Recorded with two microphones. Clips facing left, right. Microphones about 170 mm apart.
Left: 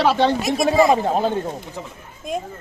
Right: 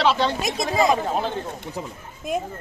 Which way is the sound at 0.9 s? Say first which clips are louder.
Left 4 dB; 40° left (ahead or behind).